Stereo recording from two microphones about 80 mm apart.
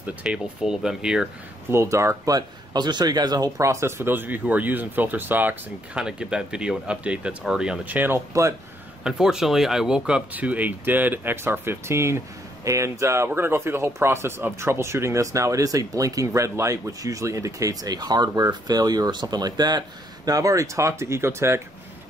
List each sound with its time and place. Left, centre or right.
0.0 s speech: centre
1.7 s speech: right
2.3 s speech: right
3.5 s speech: right
5.9 s speech: centre
7.8 s speech: right
8.3 s speech: right
9.0 s speech: centre; by 19.8 s right
20.2 s speech: right